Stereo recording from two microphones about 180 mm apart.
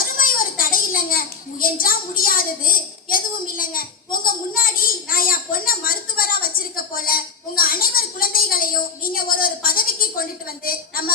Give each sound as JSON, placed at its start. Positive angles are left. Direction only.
{"t": 0.0, "sound": "a child's voice", "side_deg": 50}